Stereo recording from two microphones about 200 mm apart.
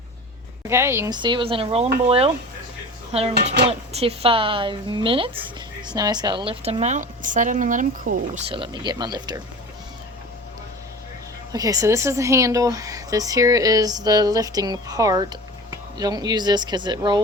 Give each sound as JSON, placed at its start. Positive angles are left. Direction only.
{"t": 0.7, "sound": "a woman's voice", "side_deg": -10}
{"t": 8.4, "sound": "a woman's voice", "side_deg": -25}
{"t": 11.5, "sound": "speech", "side_deg": -15}